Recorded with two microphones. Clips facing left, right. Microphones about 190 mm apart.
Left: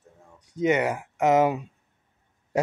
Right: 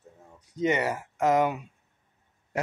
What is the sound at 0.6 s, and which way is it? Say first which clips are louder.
Speech: left 3 dB; 10° left (ahead or behind).